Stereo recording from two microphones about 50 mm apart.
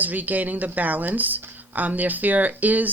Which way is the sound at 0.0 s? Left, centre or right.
Right.